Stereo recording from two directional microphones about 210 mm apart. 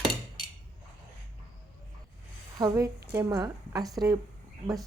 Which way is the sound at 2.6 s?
15° right (ahead or behind).